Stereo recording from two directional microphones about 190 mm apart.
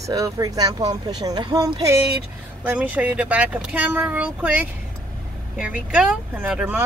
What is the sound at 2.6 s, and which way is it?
Speech, 10° right (ahead or behind).